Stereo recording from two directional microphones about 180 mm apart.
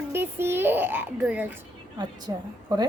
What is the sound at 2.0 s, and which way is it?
Speech, 25° right (ahead or behind).